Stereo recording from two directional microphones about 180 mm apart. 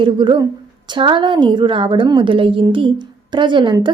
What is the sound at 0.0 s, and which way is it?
Speech, 25° right (ahead or behind).